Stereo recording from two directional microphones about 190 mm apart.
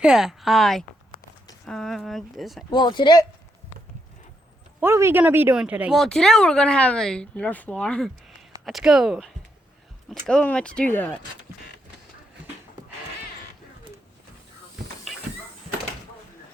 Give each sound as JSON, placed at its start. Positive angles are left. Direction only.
{"t": 0.0, "sound": "speech", "side_deg": -5}
{"t": 2.7, "sound": "speech", "side_deg": 25}
{"t": 4.8, "sound": "speech", "side_deg": -15}